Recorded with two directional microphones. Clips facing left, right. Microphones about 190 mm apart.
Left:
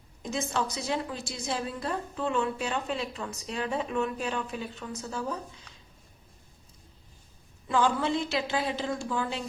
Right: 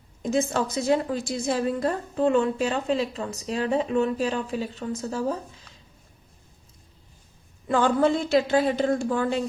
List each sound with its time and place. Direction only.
0.2 s a woman's voice: 45° right (ahead or behind)
7.7 s speech: 50° right (ahead or behind)